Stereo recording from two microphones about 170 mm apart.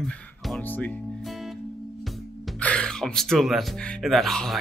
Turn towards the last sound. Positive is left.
turn(degrees=0)  # may be behind; listen again after turning